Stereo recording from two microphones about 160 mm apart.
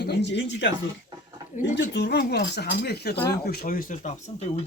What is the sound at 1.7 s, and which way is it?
Speech, 90° left.